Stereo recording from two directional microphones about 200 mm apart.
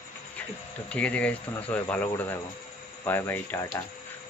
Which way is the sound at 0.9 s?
5° left (ahead or behind).